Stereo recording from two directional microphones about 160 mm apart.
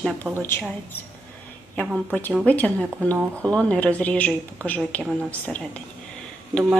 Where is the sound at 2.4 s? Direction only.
10° left (ahead or behind).